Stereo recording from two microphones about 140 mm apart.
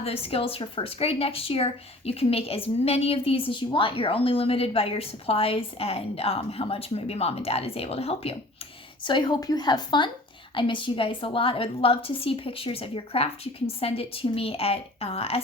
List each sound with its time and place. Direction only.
0.0 s a woman's voice: 45° left (ahead or behind)
9.0 s a woman's voice: 35° left (ahead or behind)